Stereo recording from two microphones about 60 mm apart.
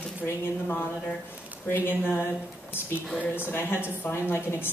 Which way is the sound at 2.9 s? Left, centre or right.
Left.